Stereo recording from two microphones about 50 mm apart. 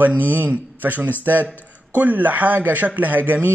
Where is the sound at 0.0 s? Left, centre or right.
Right.